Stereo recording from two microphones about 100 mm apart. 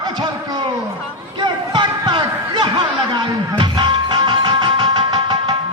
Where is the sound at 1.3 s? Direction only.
50° right (ahead or behind).